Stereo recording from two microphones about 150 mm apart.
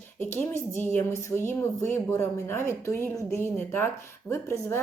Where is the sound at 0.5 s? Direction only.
15° left (ahead or behind).